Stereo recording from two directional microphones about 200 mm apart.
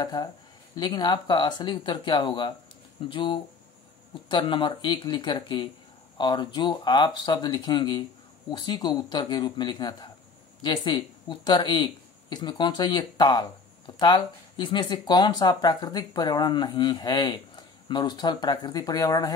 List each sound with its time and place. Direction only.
0.0 s speech: 20° left (ahead or behind)